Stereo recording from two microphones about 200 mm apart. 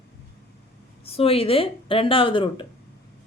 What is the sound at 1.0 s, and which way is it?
Speech, 30° left (ahead or behind).